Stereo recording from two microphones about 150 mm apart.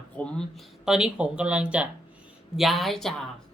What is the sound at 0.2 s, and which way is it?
A man's voice, 5° left (ahead or behind).